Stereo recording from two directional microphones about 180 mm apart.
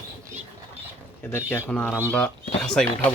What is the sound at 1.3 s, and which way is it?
Speech, 10° left (ahead or behind).